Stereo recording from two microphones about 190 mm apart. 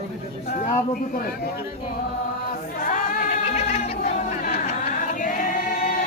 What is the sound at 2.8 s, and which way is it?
Choir, 45° left (ahead or behind).